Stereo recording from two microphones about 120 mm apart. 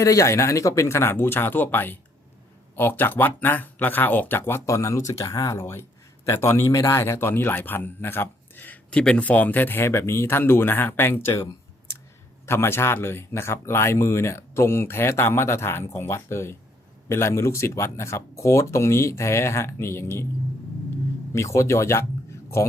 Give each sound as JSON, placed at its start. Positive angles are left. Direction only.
{"t": 0.0, "sound": "speech", "side_deg": 25}
{"t": 12.5, "sound": "speech", "side_deg": 20}
{"t": 21.3, "sound": "speech", "side_deg": 25}